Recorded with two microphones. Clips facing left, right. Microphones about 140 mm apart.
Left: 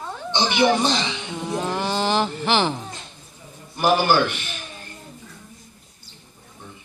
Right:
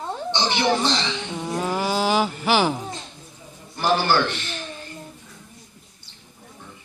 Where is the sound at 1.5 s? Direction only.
5° right (ahead or behind).